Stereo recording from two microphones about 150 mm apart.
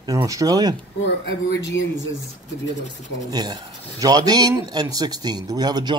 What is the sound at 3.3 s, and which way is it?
Speech, 25° right (ahead or behind).